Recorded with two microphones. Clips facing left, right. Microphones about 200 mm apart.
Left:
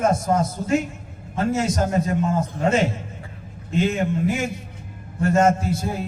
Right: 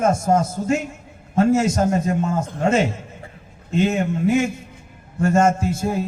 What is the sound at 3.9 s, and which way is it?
A man's voice, 45° right (ahead or behind).